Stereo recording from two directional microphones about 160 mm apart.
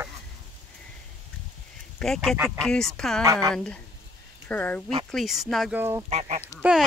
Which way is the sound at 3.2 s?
20° right (ahead or behind).